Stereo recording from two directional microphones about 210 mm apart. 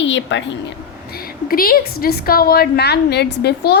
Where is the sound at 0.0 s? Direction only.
60° left (ahead or behind).